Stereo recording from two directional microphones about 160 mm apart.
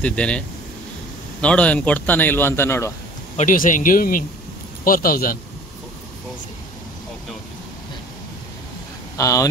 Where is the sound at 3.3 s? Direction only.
55° left (ahead or behind).